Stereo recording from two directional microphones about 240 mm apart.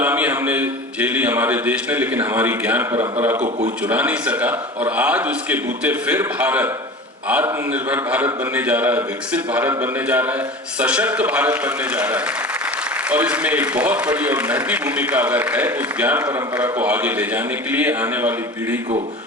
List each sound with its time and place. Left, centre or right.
0.0 s a man's voice: centre
3.3 s a man's voice: right
3.8 s a man's voice: centre